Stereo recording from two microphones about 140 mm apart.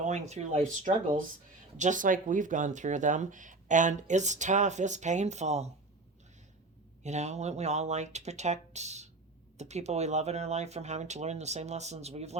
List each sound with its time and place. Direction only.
0.0 s speech: 55° right (ahead or behind)
7.0 s speech: 55° right (ahead or behind)